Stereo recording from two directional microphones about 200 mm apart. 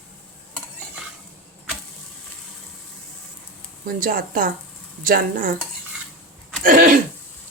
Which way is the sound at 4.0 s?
45° right (ahead or behind).